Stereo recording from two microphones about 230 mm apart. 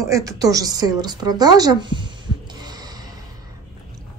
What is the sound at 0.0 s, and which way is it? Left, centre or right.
A woman's voice, centre.